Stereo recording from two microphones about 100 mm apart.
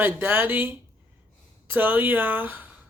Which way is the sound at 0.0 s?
20° right (ahead or behind).